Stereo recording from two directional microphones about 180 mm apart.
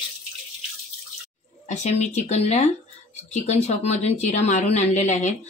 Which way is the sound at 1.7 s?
40° left (ahead or behind).